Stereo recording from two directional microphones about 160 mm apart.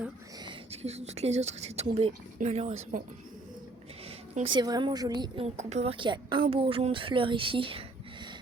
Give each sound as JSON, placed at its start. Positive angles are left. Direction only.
{"t": 0.4, "sound": "speech", "side_deg": -40}
{"t": 4.4, "sound": "a woman's voice", "side_deg": -25}
{"t": 5.5, "sound": "speech", "side_deg": -45}